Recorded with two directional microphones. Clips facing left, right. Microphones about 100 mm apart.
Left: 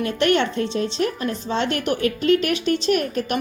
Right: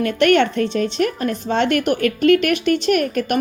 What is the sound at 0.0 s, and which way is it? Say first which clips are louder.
A woman's voice: right 4 dB; 60° right (ahead or behind).